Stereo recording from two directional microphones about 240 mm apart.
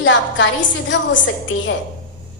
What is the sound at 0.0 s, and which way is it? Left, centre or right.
A woman's voice, left.